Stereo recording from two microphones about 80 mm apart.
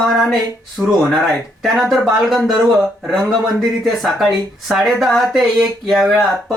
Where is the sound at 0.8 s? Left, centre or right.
Right.